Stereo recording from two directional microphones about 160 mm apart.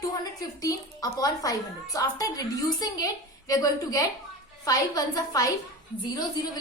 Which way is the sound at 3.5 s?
20° left (ahead or behind).